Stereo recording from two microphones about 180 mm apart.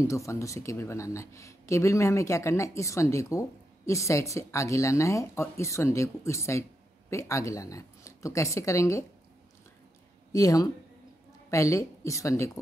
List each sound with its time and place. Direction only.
0.0 s speech: 15° left (ahead or behind)
10.3 s speech: 20° left (ahead or behind)